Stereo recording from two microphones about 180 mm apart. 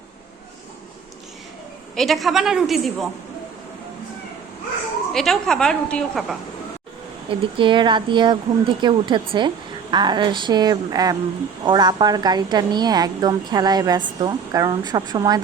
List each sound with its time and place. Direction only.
2.0 s a woman's voice: centre (ahead or behind)
5.1 s a woman's voice: centre (ahead or behind)
7.3 s a woman's voice: 30° right (ahead or behind)